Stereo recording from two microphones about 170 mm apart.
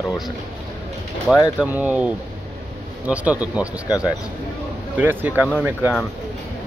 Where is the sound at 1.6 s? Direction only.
10° right (ahead or behind).